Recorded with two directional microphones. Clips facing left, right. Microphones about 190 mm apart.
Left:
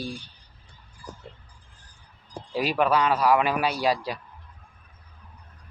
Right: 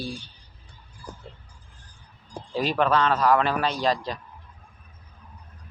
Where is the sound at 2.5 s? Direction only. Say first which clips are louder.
Even; 10° left (ahead or behind).